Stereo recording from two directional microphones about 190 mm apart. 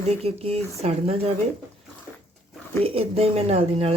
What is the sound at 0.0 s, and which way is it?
Speech, 35° right (ahead or behind).